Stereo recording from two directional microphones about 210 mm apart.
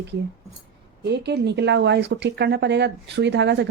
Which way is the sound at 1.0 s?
55° right (ahead or behind).